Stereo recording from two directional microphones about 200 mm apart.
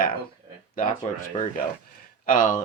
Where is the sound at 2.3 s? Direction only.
40° left (ahead or behind).